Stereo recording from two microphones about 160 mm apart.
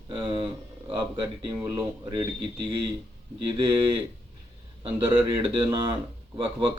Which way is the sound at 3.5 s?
30° right (ahead or behind).